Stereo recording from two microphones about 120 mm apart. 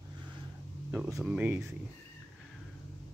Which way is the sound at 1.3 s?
15° right (ahead or behind).